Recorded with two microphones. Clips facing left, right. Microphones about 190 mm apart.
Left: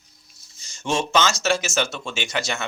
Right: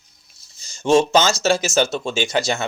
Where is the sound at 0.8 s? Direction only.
35° right (ahead or behind).